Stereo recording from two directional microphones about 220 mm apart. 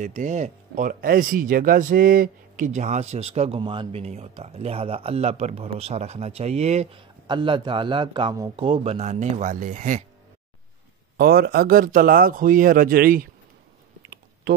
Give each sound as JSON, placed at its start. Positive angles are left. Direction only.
{"t": 0.0, "sound": "speech", "side_deg": -35}
{"t": 11.1, "sound": "speech", "side_deg": -45}